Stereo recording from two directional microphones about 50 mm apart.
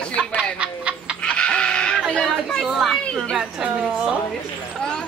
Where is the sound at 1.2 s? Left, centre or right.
Left.